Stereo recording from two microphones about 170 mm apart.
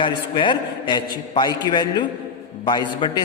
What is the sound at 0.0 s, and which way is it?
A man's voice, 30° left (ahead or behind).